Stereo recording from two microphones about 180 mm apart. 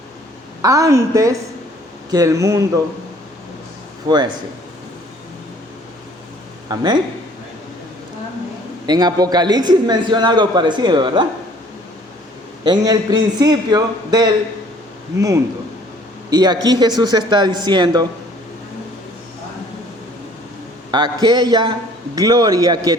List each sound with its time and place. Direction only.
0.6 s a woman's voice: 20° right (ahead or behind)
6.7 s a man's voice: 25° right (ahead or behind)
8.9 s a man's voice: 20° right (ahead or behind)
12.6 s a man's voice: 20° right (ahead or behind)
16.3 s a man's voice: 20° right (ahead or behind)
20.9 s a man's voice: 25° right (ahead or behind)